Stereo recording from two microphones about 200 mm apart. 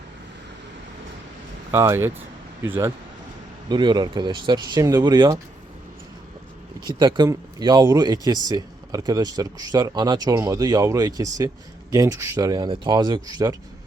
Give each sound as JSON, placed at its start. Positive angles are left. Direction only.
{"t": 1.7, "sound": "speech", "side_deg": -15}
{"t": 6.8, "sound": "speech", "side_deg": -20}